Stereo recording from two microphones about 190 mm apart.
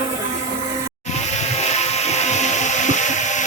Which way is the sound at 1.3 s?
35° left (ahead or behind).